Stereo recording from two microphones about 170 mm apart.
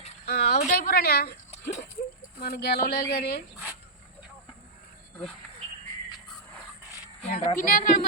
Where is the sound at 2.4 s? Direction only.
70° left (ahead or behind).